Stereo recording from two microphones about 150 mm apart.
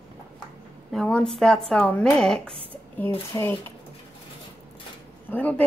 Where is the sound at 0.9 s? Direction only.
5° left (ahead or behind).